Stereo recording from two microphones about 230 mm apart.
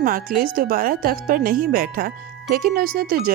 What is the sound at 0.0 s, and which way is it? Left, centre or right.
Speech, right.